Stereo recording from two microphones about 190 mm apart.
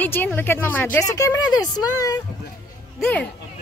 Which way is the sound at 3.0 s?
5° left (ahead or behind).